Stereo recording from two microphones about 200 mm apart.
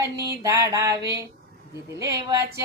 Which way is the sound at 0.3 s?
15° right (ahead or behind).